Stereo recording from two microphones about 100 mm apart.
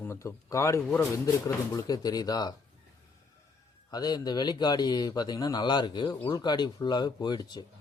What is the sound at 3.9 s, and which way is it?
Speech, 40° left (ahead or behind).